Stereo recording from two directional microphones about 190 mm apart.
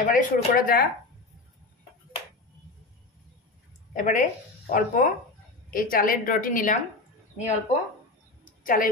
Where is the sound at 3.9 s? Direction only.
40° left (ahead or behind).